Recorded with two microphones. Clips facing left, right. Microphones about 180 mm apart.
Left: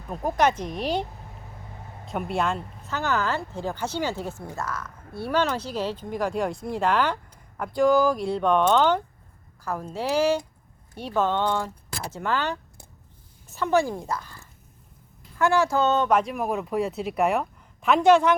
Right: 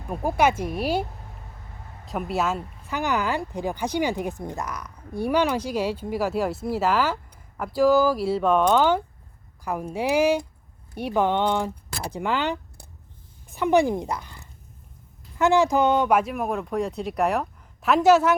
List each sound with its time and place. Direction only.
0.1 s speech: 10° right (ahead or behind)
2.0 s speech: centre (ahead or behind)